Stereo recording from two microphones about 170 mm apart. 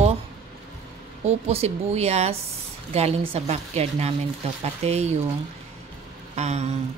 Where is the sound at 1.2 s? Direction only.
40° right (ahead or behind).